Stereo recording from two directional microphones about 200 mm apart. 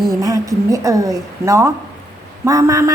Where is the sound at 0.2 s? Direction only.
15° right (ahead or behind).